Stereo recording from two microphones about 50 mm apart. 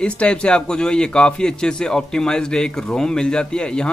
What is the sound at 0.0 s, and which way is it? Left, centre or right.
A man's voice, left.